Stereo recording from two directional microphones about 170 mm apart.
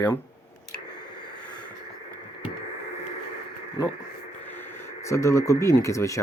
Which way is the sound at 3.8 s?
25° left (ahead or behind).